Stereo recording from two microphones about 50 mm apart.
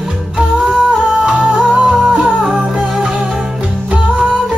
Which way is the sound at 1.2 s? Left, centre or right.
Centre.